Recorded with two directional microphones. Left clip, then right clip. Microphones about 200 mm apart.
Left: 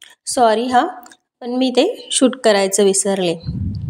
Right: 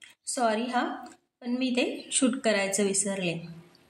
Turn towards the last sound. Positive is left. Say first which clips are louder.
# left 13 dB
turn(degrees=45)  # may be behind; listen again after turning